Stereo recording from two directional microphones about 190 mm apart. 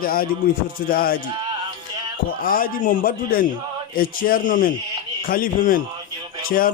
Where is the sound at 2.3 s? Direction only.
50° left (ahead or behind).